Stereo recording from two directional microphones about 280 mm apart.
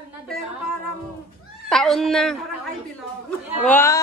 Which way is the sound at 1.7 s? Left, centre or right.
Centre.